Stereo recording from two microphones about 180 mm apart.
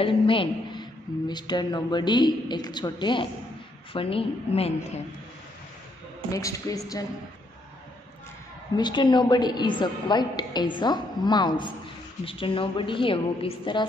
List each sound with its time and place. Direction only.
0.0 s a woman's voice: 30° left (ahead or behind)
6.3 s a woman's voice: 20° left (ahead or behind)
8.7 s a woman's voice: 25° left (ahead or behind)